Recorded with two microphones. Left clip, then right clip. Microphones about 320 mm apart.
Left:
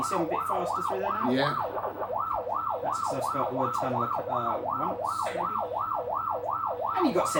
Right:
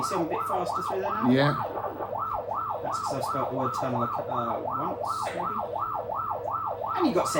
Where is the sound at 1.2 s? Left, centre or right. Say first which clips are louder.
Right 5 dB; centre.